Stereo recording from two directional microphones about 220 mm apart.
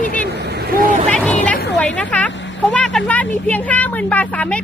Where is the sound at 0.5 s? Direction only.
40° right (ahead or behind).